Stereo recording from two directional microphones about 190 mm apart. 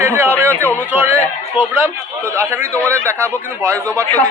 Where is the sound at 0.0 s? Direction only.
10° right (ahead or behind).